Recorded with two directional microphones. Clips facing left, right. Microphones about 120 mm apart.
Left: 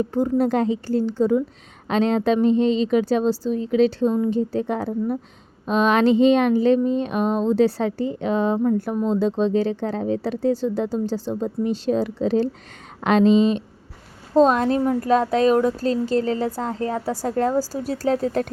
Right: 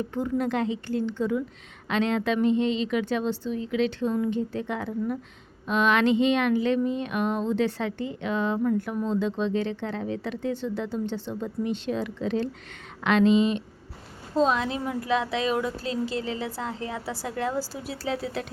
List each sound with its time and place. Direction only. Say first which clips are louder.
0.0 s speech: left 7 dB; 35° left (ahead or behind)